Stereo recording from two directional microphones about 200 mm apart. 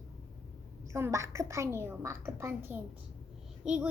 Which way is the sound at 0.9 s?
15° right (ahead or behind).